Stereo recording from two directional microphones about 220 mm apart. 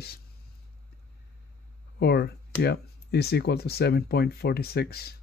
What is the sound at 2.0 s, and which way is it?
Speech, 50° left (ahead or behind).